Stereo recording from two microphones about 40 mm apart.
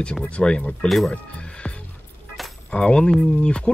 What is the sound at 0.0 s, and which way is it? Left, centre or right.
Speech, left.